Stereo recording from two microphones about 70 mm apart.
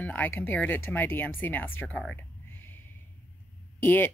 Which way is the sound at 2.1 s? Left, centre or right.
Left.